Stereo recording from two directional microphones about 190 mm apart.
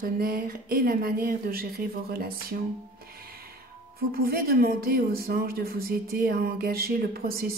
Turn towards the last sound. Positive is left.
turn(degrees=-50)  # may be behind; listen again after turning